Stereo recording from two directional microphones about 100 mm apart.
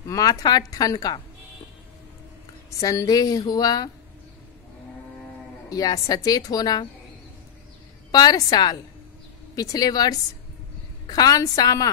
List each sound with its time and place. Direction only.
0.0 s a woman's voice: 35° left (ahead or behind)
2.8 s a woman's voice: 35° left (ahead or behind)
5.7 s a woman's voice: 40° left (ahead or behind)
8.1 s a woman's voice: 40° left (ahead or behind)